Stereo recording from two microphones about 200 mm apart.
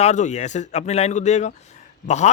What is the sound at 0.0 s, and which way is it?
A man's voice, 35° left (ahead or behind).